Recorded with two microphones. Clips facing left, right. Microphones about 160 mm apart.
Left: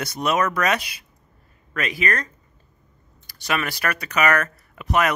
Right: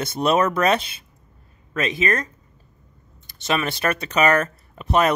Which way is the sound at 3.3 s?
25° right (ahead or behind).